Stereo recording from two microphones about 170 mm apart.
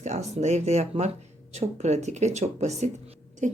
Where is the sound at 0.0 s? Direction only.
40° right (ahead or behind).